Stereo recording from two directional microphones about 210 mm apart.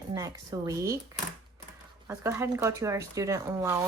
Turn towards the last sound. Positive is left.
turn(degrees=-15)  # may be behind; listen again after turning